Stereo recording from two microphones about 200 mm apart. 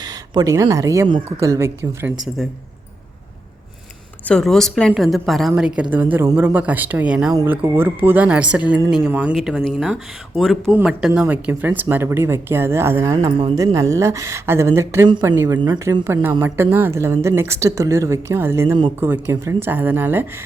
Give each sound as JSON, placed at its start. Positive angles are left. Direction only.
{"t": 0.0, "sound": "speech", "side_deg": -20}
{"t": 4.3, "sound": "a woman's voice", "side_deg": 0}
{"t": 13.1, "sound": "speech", "side_deg": -25}
{"t": 13.7, "sound": "speech", "side_deg": -15}